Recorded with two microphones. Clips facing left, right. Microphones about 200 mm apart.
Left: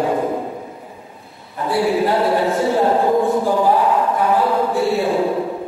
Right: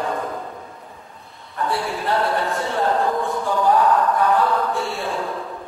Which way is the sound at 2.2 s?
15° left (ahead or behind).